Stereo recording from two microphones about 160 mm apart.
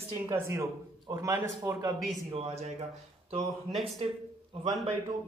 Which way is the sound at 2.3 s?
40° right (ahead or behind).